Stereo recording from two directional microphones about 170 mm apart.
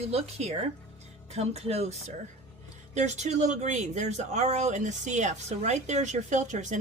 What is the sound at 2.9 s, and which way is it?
Speech, 45° right (ahead or behind).